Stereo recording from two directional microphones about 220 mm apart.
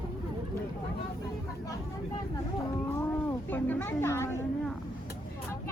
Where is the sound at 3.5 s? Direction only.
10° left (ahead or behind).